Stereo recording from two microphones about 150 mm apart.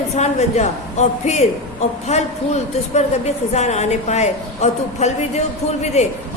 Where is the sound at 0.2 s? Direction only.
50° left (ahead or behind).